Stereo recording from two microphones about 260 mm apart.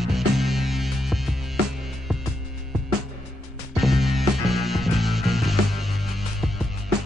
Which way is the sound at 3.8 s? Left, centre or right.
Centre.